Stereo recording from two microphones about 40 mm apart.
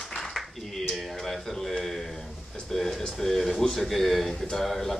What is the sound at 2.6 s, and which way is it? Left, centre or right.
Speech, centre.